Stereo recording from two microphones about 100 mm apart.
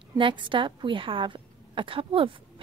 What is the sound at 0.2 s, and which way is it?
A woman's voice, 55° right (ahead or behind).